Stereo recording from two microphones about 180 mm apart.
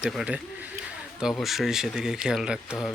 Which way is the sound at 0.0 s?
Centre (ahead or behind).